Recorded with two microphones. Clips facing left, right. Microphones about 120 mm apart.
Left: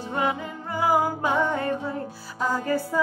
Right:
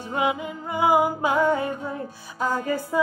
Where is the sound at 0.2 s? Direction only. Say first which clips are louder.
Right 2 dB; 15° right (ahead or behind).